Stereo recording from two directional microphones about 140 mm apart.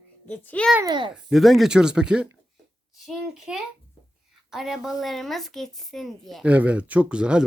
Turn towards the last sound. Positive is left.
turn(degrees=-5)  # may be behind; listen again after turning